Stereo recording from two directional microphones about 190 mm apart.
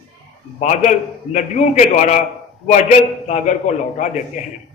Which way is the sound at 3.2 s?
40° left (ahead or behind).